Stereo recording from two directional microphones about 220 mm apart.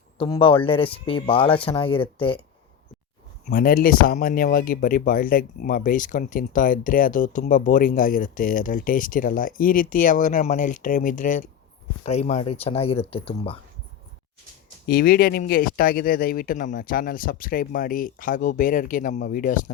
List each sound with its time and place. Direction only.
0.2 s speech: 25° left (ahead or behind)
3.4 s speech: 40° left (ahead or behind); by 13.6 s 25° left (ahead or behind)
14.8 s speech: 45° left (ahead or behind)